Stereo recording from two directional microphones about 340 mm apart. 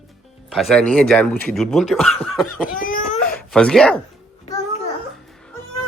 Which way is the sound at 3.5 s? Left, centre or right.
Centre.